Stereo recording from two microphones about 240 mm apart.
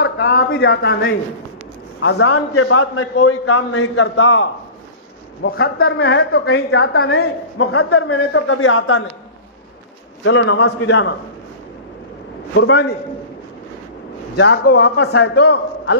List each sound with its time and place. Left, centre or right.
0.6 s a man's voice: left
2.0 s a man's voice: left
7.6 s a man's voice: left
10.2 s a man's voice: left
12.5 s a man's voice: left
14.3 s a man's voice: left